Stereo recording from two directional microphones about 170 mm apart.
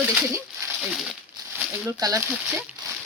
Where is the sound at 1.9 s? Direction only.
20° right (ahead or behind).